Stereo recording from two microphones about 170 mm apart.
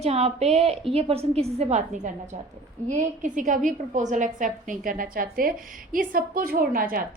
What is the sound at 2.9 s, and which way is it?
A woman's voice, 50° right (ahead or behind).